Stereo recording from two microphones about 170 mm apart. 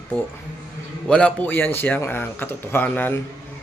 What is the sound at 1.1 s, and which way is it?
A man's voice, 10° left (ahead or behind).